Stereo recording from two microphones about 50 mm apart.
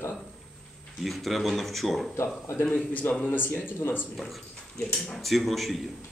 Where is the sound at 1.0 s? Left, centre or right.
Centre.